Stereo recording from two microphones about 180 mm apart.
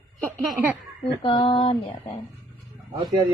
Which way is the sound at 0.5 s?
10° right (ahead or behind).